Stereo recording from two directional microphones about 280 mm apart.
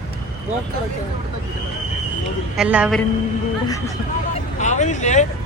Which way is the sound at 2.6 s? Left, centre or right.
Centre.